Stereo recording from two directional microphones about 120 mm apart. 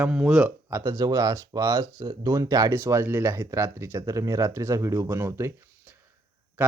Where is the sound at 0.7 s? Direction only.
25° right (ahead or behind).